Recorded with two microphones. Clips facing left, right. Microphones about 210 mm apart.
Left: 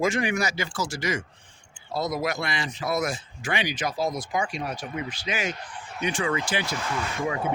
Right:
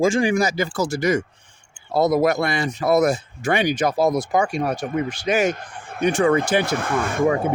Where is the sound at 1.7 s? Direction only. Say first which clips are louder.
Right 10 dB; 60° right (ahead or behind).